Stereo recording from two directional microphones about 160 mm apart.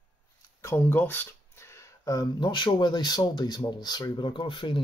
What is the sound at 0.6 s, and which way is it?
Speech, 10° left (ahead or behind).